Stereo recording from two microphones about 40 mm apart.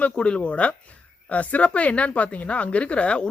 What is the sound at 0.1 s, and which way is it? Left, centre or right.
Speech, left.